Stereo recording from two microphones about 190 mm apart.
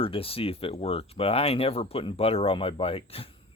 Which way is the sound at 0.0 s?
30° left (ahead or behind).